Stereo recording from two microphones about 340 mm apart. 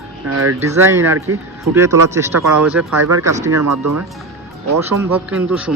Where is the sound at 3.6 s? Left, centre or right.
Right.